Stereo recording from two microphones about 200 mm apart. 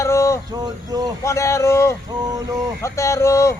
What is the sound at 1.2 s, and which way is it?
Speech, 15° left (ahead or behind).